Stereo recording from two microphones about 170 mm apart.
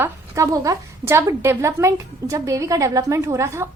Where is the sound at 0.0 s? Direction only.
20° right (ahead or behind).